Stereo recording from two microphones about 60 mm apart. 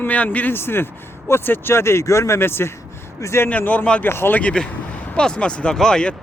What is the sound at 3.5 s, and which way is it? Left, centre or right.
Speech, left.